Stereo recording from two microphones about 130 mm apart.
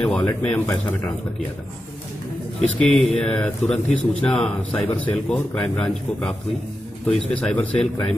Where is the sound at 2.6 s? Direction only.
10° left (ahead or behind).